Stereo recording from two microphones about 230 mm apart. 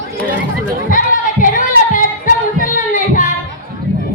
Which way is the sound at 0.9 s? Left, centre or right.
Left.